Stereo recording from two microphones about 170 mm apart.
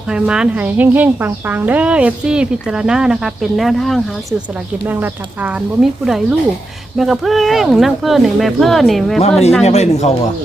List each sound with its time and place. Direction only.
0.1 s speech: 5° right (ahead or behind)
4.9 s speech: 10° right (ahead or behind)
9.6 s speech: 40° left (ahead or behind)